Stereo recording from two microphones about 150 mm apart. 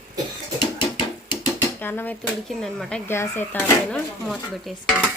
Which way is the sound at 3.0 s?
15° left (ahead or behind).